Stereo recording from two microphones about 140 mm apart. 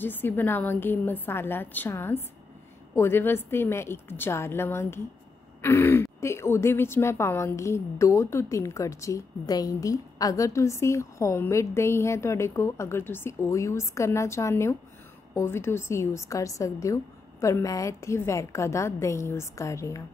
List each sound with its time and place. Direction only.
0.0 s a woman's voice: 15° left (ahead or behind)